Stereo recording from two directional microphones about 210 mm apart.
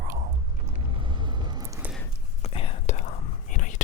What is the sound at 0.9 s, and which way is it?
Vehicle, 20° right (ahead or behind).